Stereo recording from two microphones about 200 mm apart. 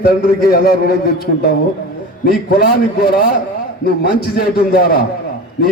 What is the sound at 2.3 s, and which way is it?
A man's voice, 50° left (ahead or behind).